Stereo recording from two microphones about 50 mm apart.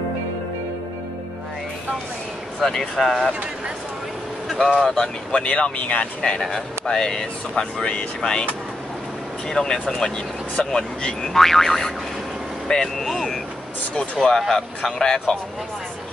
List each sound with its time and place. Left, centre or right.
2.6 s speech: centre
4.5 s speech: centre
5.4 s speech: left
6.4 s speech: centre
9.5 s speech: centre